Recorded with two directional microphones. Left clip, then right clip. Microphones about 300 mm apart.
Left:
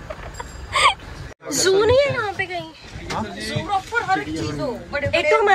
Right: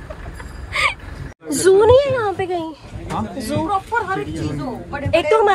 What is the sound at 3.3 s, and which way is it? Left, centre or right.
Speech, centre.